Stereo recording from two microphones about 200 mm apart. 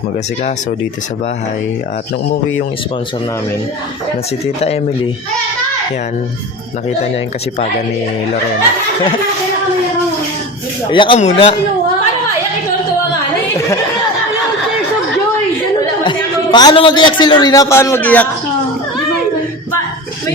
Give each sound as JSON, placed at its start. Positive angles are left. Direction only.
{"t": 4.4, "sound": "speech", "side_deg": 30}
{"t": 10.9, "sound": "speech", "side_deg": 25}
{"t": 16.0, "sound": "a man's voice", "side_deg": 20}